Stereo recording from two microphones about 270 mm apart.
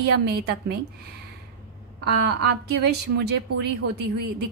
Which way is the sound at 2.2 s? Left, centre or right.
Right.